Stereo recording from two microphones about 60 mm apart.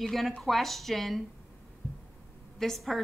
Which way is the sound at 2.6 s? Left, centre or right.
Centre.